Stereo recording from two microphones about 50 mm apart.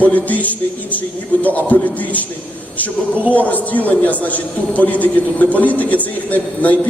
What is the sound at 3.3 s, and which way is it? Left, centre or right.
A man's voice, left.